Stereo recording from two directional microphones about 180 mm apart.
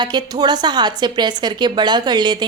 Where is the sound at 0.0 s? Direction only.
25° right (ahead or behind).